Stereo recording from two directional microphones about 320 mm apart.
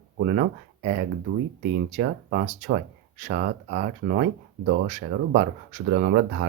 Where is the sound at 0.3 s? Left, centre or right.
Right.